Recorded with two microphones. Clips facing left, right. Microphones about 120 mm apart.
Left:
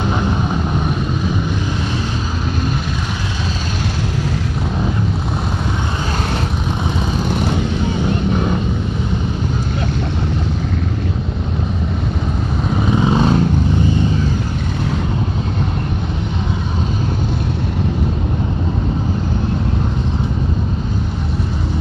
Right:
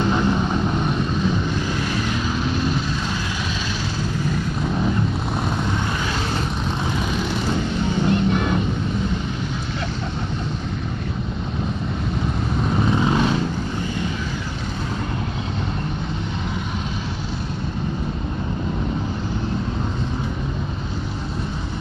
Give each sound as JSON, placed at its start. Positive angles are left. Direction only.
{"t": 13.0, "sound": "vehicle", "side_deg": 20}